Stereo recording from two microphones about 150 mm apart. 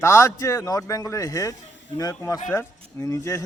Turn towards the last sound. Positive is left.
turn(degrees=20)  # may be behind; listen again after turning